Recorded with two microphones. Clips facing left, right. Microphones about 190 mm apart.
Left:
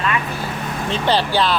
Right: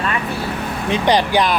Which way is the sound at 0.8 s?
15° right (ahead or behind).